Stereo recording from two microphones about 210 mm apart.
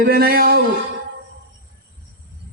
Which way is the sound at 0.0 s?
45° right (ahead or behind).